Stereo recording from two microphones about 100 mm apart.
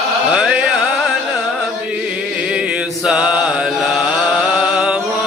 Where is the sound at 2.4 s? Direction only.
10° right (ahead or behind).